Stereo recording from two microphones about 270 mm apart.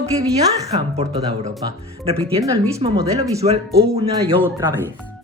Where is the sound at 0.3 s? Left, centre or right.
Right.